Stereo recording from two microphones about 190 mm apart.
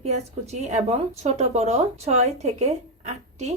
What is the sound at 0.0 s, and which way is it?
Speech, 35° right (ahead or behind).